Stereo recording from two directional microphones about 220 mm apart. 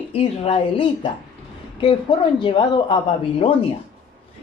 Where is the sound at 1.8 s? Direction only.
25° left (ahead or behind).